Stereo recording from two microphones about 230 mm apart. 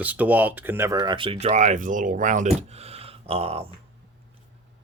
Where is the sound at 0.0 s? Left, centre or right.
Centre; by 3.7 s right.